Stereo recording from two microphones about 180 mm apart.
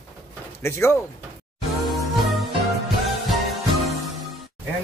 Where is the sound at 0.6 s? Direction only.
15° left (ahead or behind).